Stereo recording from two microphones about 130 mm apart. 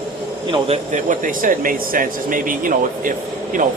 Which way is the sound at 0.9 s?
90° right.